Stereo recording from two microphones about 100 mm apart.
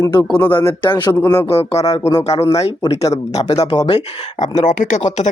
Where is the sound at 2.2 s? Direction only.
90° left; by 4.0 s 75° left (ahead or behind).